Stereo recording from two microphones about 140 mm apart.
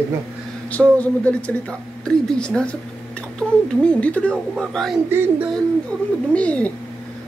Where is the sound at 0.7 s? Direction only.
10° left (ahead or behind).